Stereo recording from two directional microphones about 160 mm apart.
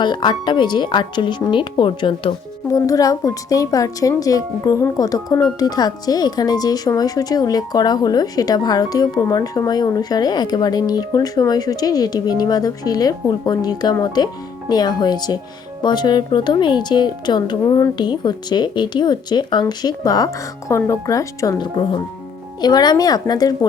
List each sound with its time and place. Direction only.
0.0 s speech: 30° left (ahead or behind)